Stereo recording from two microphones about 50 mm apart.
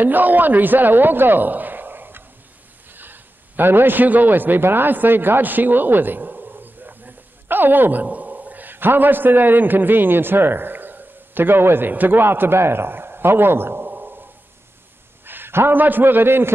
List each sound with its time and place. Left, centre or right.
0.0 s a man's voice: right
13.8 s a sound: right
15.2 s a man's voice: right